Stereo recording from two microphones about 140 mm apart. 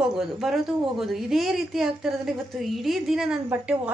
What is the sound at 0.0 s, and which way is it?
A woman's voice, 5° right (ahead or behind).